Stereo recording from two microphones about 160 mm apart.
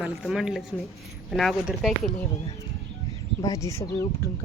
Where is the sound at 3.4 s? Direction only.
20° left (ahead or behind).